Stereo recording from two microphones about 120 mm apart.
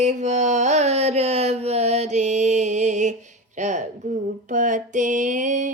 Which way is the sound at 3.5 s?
85° right.